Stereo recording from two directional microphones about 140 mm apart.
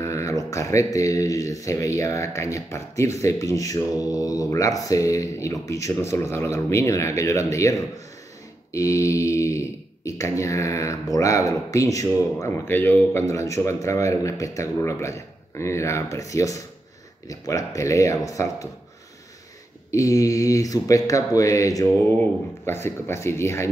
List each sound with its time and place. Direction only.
0.0 s a sound: 20° left (ahead or behind)
0.9 s speech: 25° left (ahead or behind)
19.9 s speech: 25° left (ahead or behind)